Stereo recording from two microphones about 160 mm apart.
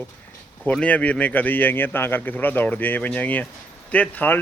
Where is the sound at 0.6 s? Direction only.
10° left (ahead or behind).